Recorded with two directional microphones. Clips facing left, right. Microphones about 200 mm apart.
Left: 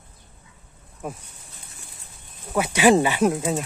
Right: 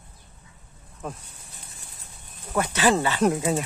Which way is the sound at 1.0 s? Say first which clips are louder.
Left 2 dB; 10° left (ahead or behind).